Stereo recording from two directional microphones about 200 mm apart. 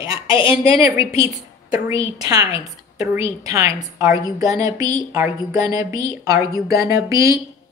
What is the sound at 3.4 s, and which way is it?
Speech, 15° right (ahead or behind).